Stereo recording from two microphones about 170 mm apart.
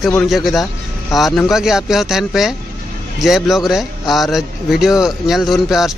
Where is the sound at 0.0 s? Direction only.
Centre (ahead or behind).